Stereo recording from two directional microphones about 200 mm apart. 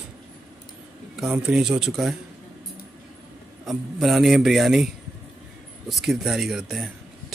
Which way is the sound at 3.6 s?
Centre (ahead or behind).